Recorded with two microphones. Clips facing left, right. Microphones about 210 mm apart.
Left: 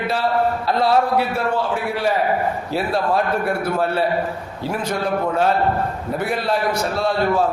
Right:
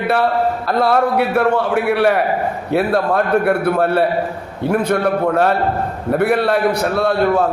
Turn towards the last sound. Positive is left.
turn(degrees=-60)  # may be behind; listen again after turning